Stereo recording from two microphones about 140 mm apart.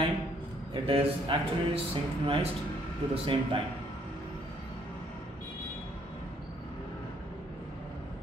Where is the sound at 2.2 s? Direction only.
45° right (ahead or behind).